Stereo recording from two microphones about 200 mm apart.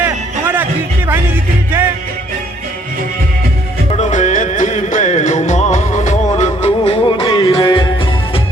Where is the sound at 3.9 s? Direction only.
40° left (ahead or behind).